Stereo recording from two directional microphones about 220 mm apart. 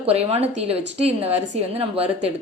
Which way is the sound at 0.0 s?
30° right (ahead or behind).